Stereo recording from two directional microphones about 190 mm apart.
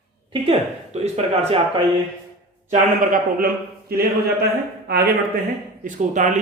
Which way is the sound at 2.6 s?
45° right (ahead or behind).